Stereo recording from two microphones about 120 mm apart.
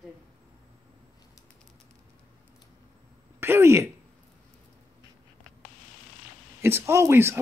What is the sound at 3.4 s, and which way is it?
Speech, 20° right (ahead or behind).